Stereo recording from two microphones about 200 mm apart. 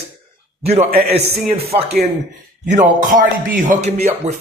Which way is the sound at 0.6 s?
30° right (ahead or behind).